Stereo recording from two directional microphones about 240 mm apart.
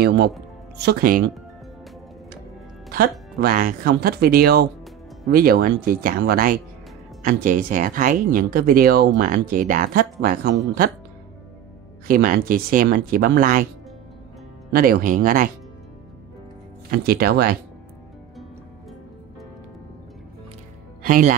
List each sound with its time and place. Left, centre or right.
0.7 s speech: right
2.9 s speech: right
12.1 s speech: right
14.7 s speech: right
17.0 s speech: right
21.0 s speech: right